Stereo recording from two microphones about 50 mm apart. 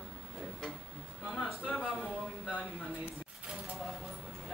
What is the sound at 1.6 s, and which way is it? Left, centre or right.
Speech, centre.